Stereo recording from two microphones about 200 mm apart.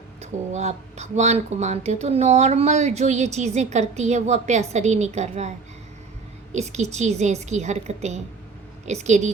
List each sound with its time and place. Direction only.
0.2 s speech: 35° right (ahead or behind)
6.5 s speech: 35° right (ahead or behind)